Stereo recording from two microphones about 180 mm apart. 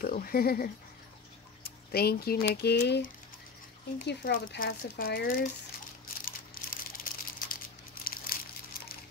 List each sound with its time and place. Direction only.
0.0 s speech: 55° left (ahead or behind)
4.1 s speech: 60° left (ahead or behind)
6.2 s a sound: 55° left (ahead or behind)